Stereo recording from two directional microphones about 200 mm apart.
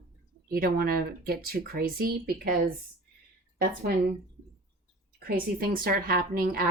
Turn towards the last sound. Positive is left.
turn(degrees=-45)  # may be behind; listen again after turning